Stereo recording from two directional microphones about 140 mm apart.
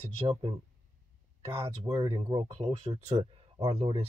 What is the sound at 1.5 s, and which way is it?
Speech, 45° right (ahead or behind).